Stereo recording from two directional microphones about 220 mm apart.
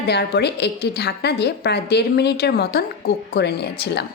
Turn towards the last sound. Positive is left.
turn(degrees=50)  # may be behind; listen again after turning